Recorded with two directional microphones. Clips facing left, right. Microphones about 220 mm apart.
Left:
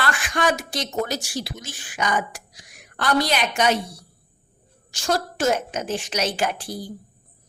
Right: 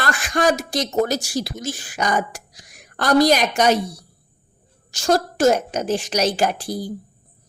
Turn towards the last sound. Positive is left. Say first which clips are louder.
# right 4 dB
turn(degrees=-40)  # may be behind; listen again after turning